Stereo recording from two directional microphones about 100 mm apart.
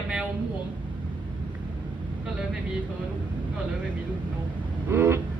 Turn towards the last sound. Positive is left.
turn(degrees=-20)  # may be behind; listen again after turning